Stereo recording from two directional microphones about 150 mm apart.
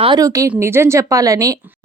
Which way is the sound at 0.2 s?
20° right (ahead or behind).